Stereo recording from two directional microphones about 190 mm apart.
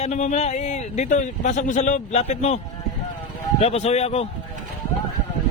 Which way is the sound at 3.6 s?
35° left (ahead or behind).